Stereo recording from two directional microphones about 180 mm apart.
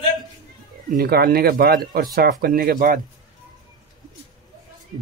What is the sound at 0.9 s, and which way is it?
Speech, 55° right (ahead or behind).